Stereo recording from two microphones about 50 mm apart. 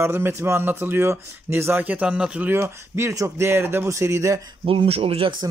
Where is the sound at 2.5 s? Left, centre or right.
Right.